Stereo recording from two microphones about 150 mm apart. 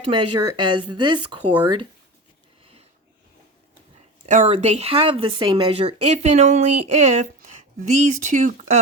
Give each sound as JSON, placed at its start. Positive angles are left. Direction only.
{"t": 0.1, "sound": "speech", "side_deg": -30}
{"t": 4.3, "sound": "speech", "side_deg": -55}
{"t": 4.5, "sound": "speech", "side_deg": -45}